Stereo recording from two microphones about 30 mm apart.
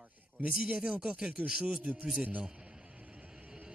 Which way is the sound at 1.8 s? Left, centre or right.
Right.